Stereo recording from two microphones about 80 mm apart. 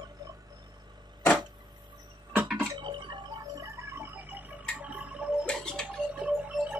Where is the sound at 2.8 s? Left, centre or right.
Right.